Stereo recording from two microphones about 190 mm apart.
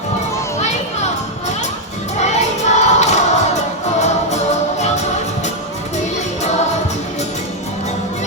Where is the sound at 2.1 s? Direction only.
35° left (ahead or behind).